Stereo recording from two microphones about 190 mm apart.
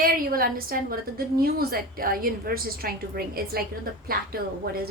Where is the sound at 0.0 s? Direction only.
50° right (ahead or behind).